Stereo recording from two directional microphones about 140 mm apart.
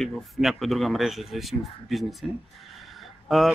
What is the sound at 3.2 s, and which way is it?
Speech, centre (ahead or behind).